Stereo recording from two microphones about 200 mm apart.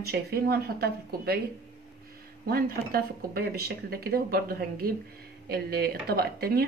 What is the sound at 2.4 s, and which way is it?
Speech, 50° right (ahead or behind).